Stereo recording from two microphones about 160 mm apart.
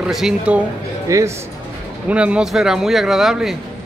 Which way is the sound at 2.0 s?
5° right (ahead or behind).